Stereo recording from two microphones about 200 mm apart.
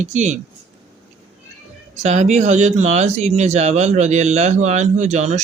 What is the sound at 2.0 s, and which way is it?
Speech, 35° right (ahead or behind).